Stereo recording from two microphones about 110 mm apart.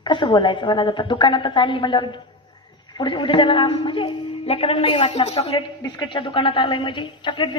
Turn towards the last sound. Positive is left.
turn(degrees=50)  # may be behind; listen again after turning